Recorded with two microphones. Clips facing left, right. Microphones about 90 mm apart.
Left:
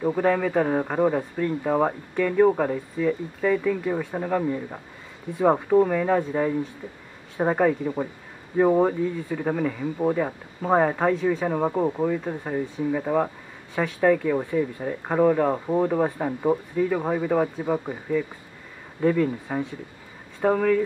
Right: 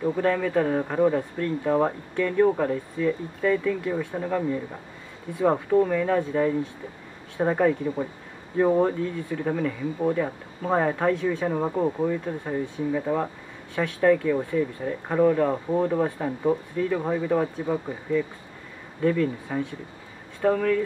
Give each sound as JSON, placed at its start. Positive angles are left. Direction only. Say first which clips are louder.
{"t": 0.2, "sound": "speech", "louder": "left 1 dB", "side_deg": 15}